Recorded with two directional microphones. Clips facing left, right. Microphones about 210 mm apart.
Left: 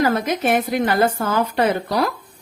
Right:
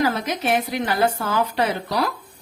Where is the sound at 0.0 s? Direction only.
50° left (ahead or behind).